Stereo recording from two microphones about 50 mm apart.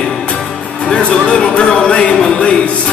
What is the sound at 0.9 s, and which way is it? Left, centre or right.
A man's voice, centre.